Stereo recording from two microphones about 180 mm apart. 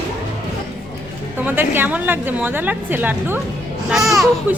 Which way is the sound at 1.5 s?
10° right (ahead or behind).